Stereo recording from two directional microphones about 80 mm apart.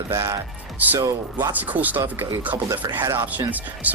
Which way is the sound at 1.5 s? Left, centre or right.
Right.